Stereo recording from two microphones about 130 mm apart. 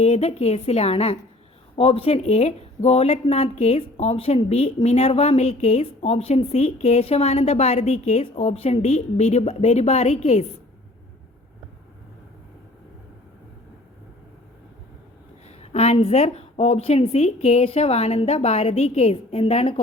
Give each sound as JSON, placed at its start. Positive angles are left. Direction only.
{"t": 0.0, "sound": "speech", "side_deg": 50}
{"t": 15.4, "sound": "speech", "side_deg": 55}